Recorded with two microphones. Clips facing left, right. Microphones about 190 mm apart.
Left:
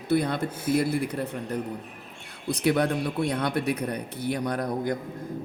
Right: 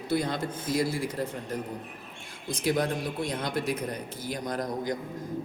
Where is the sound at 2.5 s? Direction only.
65° left (ahead or behind).